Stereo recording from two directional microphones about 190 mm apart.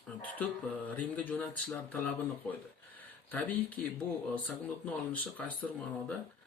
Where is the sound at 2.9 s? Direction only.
10° left (ahead or behind).